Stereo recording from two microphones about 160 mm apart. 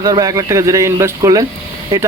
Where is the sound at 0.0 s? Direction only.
25° right (ahead or behind).